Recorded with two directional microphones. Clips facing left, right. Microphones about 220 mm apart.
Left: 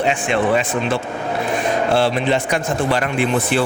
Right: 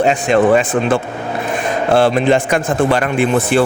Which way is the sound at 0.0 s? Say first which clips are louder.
Right 6 dB; 40° right (ahead or behind).